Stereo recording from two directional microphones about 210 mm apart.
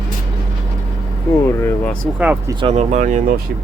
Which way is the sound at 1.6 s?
5° left (ahead or behind).